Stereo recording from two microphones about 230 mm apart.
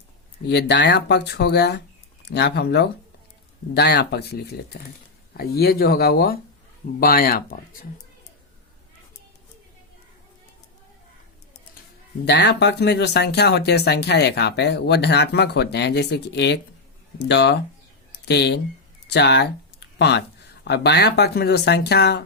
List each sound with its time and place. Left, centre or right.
0.4 s speech: left
12.2 s speech: left